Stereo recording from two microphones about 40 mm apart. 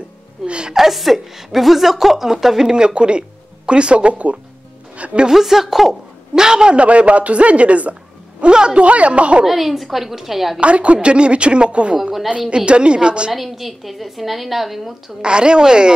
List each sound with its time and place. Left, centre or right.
0.5 s a woman's voice: right
0.7 s a woman's voice: centre
2.7 s speech: right
4.9 s music: right
5.3 s a woman's voice: centre; by 7.9 s right
8.4 s a woman's voice: right
8.8 s speech: right
9.5 s a woman's voice: centre
10.6 s a woman's voice: right
12.0 s a woman's voice: centre
12.3 s a woman's voice: right
13.3 s a woman's voice: centre
15.2 s a woman's voice: right